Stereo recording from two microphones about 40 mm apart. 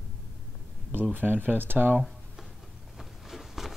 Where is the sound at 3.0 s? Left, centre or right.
Centre.